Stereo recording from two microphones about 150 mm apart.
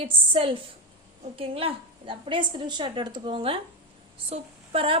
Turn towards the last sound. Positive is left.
turn(degrees=-35)  # may be behind; listen again after turning